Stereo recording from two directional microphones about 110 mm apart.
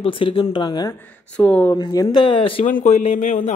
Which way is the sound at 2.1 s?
55° left (ahead or behind).